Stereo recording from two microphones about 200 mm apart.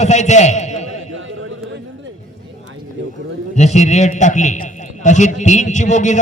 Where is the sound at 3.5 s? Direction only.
35° left (ahead or behind).